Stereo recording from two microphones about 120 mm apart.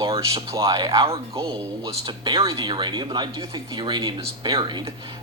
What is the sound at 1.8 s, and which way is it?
A man's voice, 40° right (ahead or behind).